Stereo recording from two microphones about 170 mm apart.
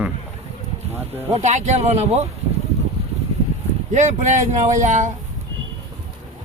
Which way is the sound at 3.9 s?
45° right (ahead or behind).